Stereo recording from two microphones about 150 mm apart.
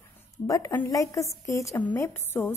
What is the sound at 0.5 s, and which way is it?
A woman's voice, 20° left (ahead or behind).